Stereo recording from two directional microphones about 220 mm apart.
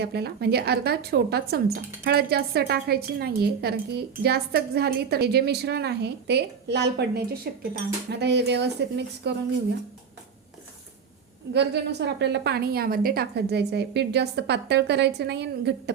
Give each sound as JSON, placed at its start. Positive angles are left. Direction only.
{"t": 0.0, "sound": "a woman's voice", "side_deg": -50}
{"t": 11.5, "sound": "a woman's voice", "side_deg": -50}